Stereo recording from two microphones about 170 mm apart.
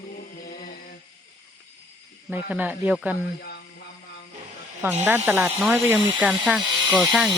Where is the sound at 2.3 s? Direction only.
10° right (ahead or behind).